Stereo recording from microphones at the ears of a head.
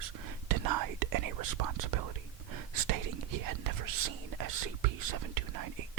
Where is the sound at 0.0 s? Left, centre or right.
Right.